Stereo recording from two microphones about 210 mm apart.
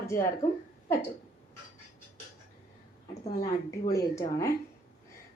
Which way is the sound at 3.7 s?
15° left (ahead or behind).